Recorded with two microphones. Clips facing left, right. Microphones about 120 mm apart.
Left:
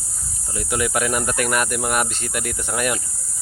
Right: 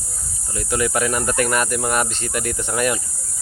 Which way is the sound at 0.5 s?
10° left (ahead or behind).